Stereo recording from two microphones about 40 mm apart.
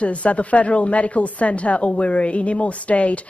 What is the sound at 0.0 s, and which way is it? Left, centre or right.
A woman's voice, left.